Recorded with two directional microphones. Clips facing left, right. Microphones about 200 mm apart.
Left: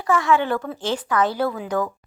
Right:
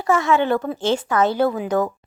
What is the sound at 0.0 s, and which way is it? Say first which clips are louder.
Speech: right 2 dB; 25° right (ahead or behind).